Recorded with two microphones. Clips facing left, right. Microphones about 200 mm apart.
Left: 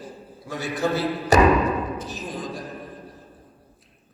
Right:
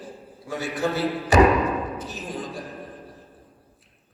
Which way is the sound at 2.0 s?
40° left (ahead or behind).